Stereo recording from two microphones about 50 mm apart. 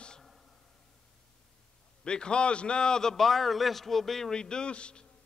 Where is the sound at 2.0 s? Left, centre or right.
Centre.